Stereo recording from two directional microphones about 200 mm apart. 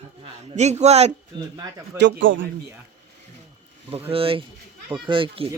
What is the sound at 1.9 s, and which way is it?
Speech, 60° right (ahead or behind).